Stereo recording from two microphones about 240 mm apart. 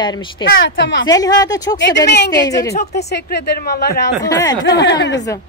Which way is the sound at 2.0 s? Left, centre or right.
Left.